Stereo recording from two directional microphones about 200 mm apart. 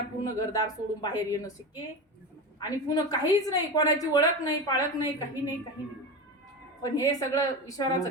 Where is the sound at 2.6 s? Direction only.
20° left (ahead or behind).